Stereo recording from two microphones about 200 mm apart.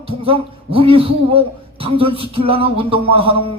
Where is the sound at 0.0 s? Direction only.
25° right (ahead or behind).